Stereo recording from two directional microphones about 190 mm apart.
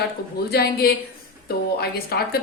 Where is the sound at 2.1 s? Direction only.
55° left (ahead or behind).